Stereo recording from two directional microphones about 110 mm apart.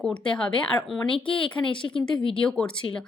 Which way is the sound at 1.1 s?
50° left (ahead or behind).